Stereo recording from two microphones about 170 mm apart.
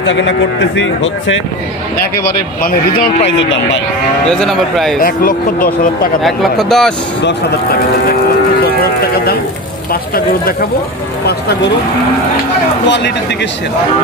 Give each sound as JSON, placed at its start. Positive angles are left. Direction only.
{"t": 0.0, "sound": "a man's voice", "side_deg": 90}
{"t": 2.2, "sound": "speech", "side_deg": 60}
{"t": 3.3, "sound": "a man's voice", "side_deg": 90}
{"t": 4.3, "sound": "speech", "side_deg": 0}
{"t": 4.9, "sound": "speech", "side_deg": 60}
{"t": 6.2, "sound": "speech", "side_deg": 0}
{"t": 12.8, "sound": "a man's voice", "side_deg": 90}